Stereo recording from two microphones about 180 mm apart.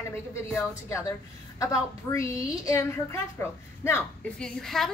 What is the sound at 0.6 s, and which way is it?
A woman's voice, 15° left (ahead or behind).